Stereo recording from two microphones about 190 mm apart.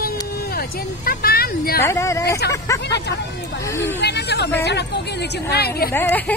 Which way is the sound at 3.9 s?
60° left (ahead or behind).